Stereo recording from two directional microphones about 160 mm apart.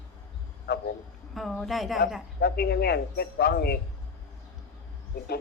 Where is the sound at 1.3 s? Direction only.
Centre (ahead or behind).